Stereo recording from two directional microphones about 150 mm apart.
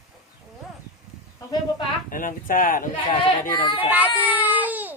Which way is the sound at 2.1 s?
65° left (ahead or behind).